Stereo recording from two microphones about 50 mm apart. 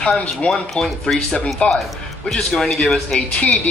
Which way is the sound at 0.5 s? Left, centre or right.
Centre.